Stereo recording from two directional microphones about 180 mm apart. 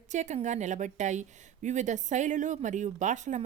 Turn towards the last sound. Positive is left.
turn(degrees=-40)  # may be behind; listen again after turning